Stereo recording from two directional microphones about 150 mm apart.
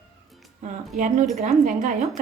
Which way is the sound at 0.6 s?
55° right (ahead or behind).